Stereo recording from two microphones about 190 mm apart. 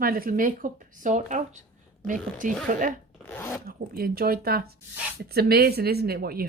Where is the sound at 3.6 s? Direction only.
50° right (ahead or behind).